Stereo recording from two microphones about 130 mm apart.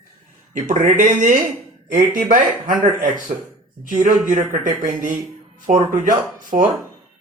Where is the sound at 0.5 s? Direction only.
80° right.